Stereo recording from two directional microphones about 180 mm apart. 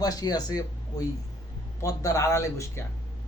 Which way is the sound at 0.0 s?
20° left (ahead or behind).